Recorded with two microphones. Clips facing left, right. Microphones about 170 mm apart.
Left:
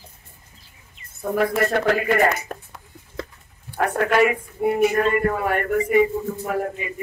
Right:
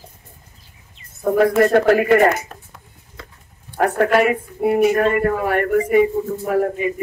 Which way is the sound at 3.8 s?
40° right (ahead or behind).